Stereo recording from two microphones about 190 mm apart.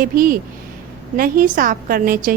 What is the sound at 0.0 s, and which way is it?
A woman's voice, 50° right (ahead or behind).